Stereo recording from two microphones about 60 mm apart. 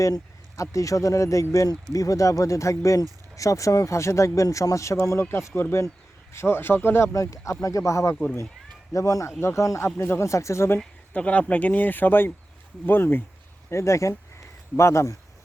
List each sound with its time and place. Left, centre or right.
0.0 s speech: left
7.1 s speech: left
8.1 s speech: left
8.9 s speech: left
9.4 s speech: left
11.1 s speech: left
13.7 s speech: left